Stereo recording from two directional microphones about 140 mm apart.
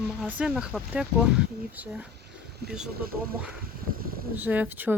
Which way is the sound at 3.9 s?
90° right.